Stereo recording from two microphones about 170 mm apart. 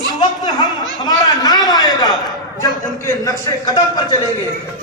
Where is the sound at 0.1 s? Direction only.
25° left (ahead or behind).